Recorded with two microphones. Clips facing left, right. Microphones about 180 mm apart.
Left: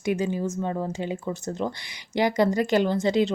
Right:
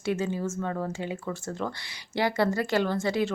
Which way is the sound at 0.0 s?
15° left (ahead or behind).